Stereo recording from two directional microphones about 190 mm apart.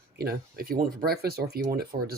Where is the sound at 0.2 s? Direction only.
55° right (ahead or behind).